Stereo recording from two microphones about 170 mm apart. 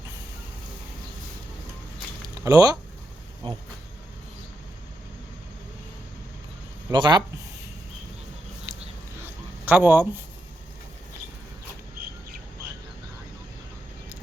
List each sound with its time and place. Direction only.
2.4 s speech: 20° right (ahead or behind)
6.9 s speech: 25° right (ahead or behind)
9.2 s a sound: 10° right (ahead or behind)